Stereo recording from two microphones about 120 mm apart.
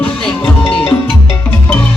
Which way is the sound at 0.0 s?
10° left (ahead or behind).